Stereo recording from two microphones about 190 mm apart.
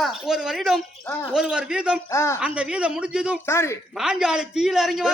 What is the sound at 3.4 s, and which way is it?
Speech, 15° left (ahead or behind).